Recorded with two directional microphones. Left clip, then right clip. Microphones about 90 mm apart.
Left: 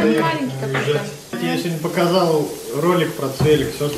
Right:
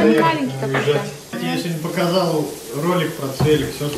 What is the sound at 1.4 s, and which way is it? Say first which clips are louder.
Speech: left 2 dB; 30° left (ahead or behind).